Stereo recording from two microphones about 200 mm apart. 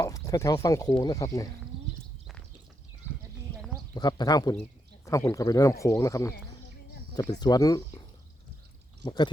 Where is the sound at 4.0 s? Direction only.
20° left (ahead or behind).